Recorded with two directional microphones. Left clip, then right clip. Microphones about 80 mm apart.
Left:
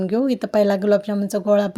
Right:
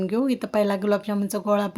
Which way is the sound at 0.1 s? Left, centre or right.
Left.